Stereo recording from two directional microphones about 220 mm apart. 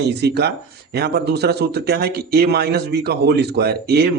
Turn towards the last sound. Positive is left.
turn(degrees=-45)  # may be behind; listen again after turning